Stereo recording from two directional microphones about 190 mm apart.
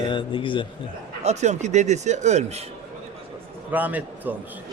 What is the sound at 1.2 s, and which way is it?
A man's voice, 35° right (ahead or behind).